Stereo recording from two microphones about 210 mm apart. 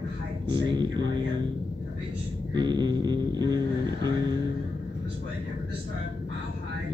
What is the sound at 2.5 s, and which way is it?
Speech, 20° right (ahead or behind).